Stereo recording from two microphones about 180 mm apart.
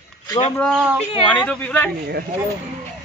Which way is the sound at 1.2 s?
5° left (ahead or behind).